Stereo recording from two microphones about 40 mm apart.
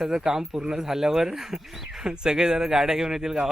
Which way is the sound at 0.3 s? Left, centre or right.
Centre.